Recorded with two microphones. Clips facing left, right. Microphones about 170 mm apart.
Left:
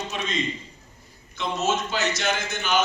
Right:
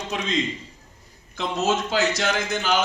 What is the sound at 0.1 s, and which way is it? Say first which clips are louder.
Speech: right 4 dB; 90° right.